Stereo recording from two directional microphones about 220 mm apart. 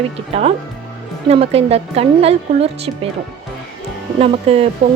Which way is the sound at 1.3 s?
25° right (ahead or behind).